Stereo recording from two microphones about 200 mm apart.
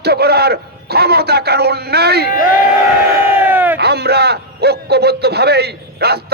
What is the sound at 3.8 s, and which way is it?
A man's voice, 55° right (ahead or behind).